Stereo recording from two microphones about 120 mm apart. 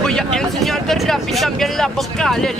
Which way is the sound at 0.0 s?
5° left (ahead or behind).